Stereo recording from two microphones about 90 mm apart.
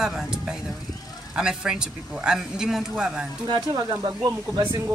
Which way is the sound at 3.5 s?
50° right (ahead or behind).